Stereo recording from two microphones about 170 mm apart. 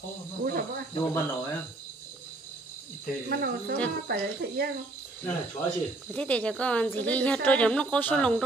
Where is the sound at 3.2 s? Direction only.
65° right (ahead or behind).